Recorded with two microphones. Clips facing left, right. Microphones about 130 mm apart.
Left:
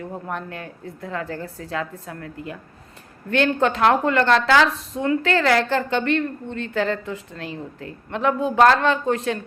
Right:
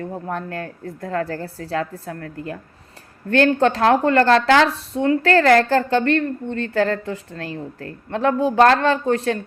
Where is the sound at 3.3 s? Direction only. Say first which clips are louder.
Right 4 dB; 35° right (ahead or behind).